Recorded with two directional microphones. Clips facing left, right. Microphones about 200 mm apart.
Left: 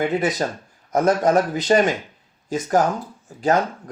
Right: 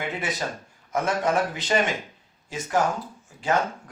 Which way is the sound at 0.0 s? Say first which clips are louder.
Left 9 dB; 40° left (ahead or behind).